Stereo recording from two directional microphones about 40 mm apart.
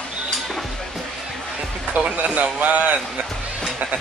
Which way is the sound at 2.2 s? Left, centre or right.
Right.